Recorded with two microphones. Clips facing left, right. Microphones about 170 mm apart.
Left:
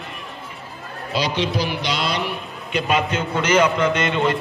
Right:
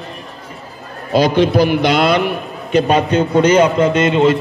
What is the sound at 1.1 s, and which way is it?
A man's voice, 50° right (ahead or behind).